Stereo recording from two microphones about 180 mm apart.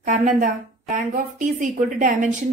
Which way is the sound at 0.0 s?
45° right (ahead or behind).